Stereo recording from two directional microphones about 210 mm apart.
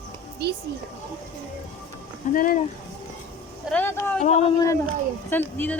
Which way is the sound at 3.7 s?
10° left (ahead or behind).